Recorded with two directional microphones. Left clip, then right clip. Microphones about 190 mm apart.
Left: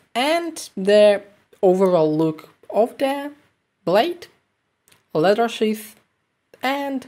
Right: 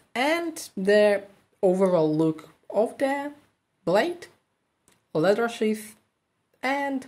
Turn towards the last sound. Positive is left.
turn(degrees=15)  # may be behind; listen again after turning